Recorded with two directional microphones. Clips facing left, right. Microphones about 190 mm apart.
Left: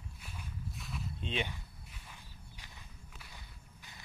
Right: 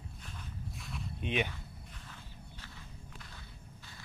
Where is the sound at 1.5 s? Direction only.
15° left (ahead or behind).